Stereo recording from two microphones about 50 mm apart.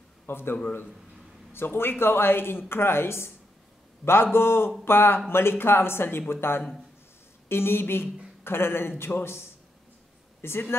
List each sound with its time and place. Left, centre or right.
0.3 s speech: left
10.4 s speech: left